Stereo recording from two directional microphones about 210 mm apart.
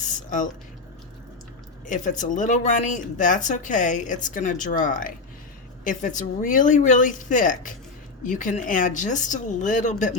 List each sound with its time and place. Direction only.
0.3 s speech: 35° left (ahead or behind)
1.9 s speech: 35° left (ahead or behind)